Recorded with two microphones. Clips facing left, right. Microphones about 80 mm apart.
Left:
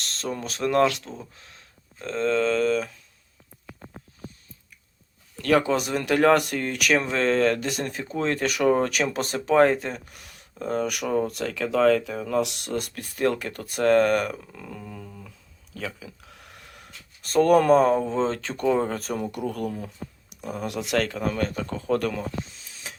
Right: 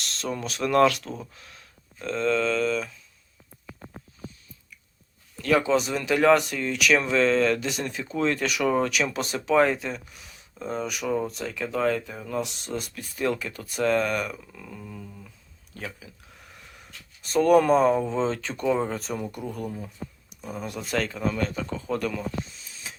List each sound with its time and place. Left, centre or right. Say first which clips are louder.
0.0 s speech: even; left
5.4 s speech: left 1 dB; left
15.8 s a sound: left 3 dB; left
17.3 s speech: left 1 dB; left